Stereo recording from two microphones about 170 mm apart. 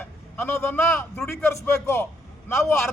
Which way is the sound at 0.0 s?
10° left (ahead or behind).